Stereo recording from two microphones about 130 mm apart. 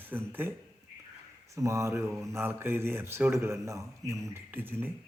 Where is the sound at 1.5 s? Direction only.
25° right (ahead or behind).